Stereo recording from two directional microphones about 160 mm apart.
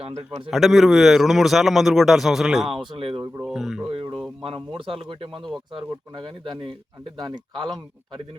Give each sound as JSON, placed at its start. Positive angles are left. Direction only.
{"t": 0.0, "sound": "speech", "side_deg": -40}
{"t": 0.5, "sound": "a man's voice", "side_deg": 0}
{"t": 2.9, "sound": "speech", "side_deg": -30}
{"t": 3.4, "sound": "a man's voice", "side_deg": 0}
{"t": 3.8, "sound": "speech", "side_deg": -30}